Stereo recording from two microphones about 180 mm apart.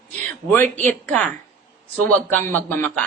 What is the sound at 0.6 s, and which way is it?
Speech, 10° left (ahead or behind).